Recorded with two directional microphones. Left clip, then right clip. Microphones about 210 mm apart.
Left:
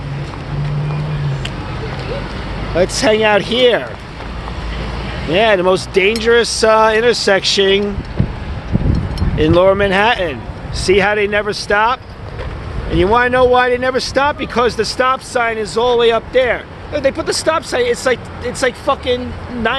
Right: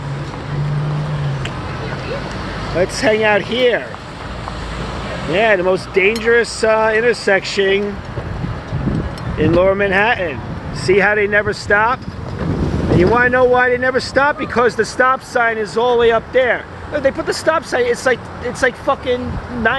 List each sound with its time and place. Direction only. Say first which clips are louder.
2.7 s speech: left 2 dB; 15° left (ahead or behind)
5.3 s speech: left 2 dB; 20° left (ahead or behind)
9.4 s speech: left 2 dB; 20° left (ahead or behind)
10.8 s speech: left 1 dB; 10° left (ahead or behind)
13.0 s speech: left 1 dB; 10° left (ahead or behind)